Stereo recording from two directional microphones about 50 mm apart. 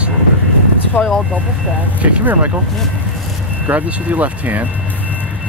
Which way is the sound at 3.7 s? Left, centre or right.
Right.